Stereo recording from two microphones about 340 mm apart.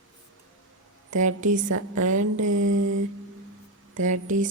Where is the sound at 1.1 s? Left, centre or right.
Right.